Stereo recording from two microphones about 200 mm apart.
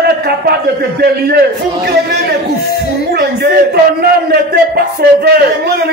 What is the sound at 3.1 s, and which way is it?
A man's voice, 55° right (ahead or behind).